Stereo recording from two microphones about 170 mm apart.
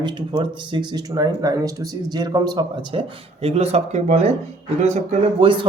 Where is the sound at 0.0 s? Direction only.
25° right (ahead or behind).